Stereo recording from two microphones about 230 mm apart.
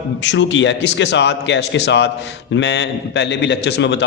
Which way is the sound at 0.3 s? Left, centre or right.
Left.